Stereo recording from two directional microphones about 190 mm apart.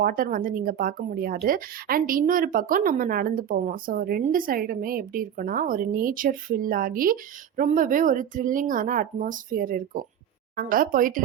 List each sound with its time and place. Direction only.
0.0 s a woman's voice: 50° right (ahead or behind)